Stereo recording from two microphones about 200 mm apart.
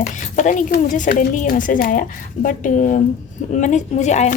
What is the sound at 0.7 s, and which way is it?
A woman's voice, 40° left (ahead or behind).